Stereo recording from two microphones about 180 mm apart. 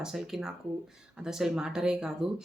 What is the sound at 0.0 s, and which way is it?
Speech, centre (ahead or behind).